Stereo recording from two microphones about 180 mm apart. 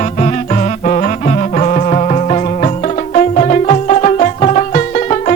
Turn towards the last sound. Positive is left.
turn(degrees=40)  # may be behind; listen again after turning